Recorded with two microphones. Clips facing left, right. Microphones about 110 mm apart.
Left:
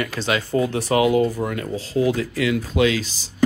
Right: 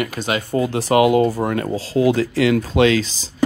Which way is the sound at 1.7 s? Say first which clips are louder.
Right 4 dB; 30° right (ahead or behind).